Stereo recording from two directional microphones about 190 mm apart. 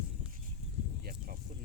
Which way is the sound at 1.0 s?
55° right (ahead or behind).